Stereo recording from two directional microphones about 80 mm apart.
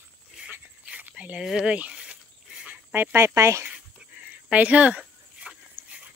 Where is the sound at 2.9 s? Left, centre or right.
Right.